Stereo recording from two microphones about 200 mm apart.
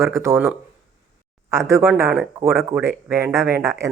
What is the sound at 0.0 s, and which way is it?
Speech, 15° right (ahead or behind).